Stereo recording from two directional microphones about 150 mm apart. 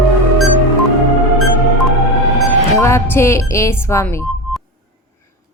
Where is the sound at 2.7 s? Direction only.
20° left (ahead or behind).